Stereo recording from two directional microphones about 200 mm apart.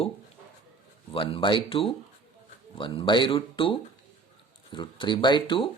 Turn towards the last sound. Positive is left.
turn(degrees=25)  # may be behind; listen again after turning